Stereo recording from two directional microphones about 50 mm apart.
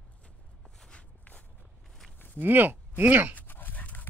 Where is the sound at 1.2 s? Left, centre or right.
Left.